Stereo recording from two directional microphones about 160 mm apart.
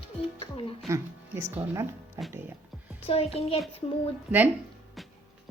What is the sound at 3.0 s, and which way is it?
Speech, 40° left (ahead or behind).